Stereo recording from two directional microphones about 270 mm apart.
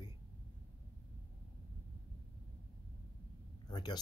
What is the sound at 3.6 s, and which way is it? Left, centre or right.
Speech, centre.